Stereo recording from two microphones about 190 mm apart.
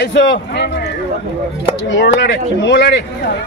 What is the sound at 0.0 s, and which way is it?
Speech, 65° left (ahead or behind).